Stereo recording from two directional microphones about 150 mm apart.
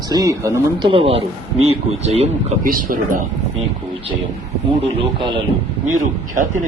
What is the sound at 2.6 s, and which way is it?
Speech, 65° right (ahead or behind).